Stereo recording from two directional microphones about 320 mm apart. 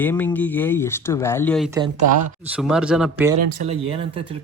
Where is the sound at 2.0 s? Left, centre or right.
Right.